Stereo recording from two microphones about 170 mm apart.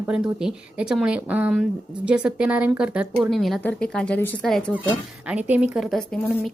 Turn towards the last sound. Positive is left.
turn(degrees=5)  # may be behind; listen again after turning